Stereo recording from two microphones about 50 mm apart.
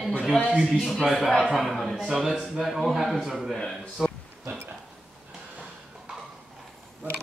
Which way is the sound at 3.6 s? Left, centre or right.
Centre.